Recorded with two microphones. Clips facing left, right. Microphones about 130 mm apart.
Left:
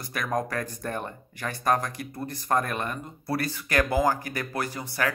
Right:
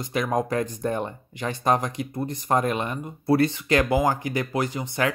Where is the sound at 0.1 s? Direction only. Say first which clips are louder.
Right 4 dB; 20° right (ahead or behind).